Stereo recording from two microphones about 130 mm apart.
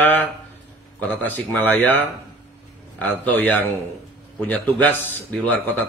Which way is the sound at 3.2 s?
10° left (ahead or behind).